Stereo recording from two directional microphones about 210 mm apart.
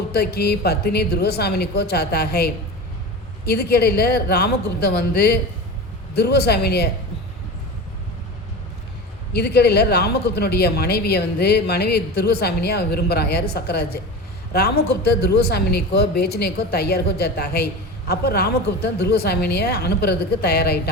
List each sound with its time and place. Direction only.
0.1 s speech: 50° left (ahead or behind)
9.3 s speech: 50° left (ahead or behind)